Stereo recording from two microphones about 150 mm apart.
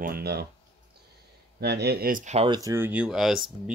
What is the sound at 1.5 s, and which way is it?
Speech, 90° right.